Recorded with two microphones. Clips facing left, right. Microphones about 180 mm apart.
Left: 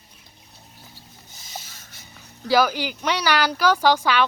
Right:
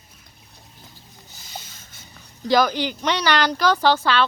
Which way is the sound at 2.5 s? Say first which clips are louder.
Right 1 dB; 10° left (ahead or behind).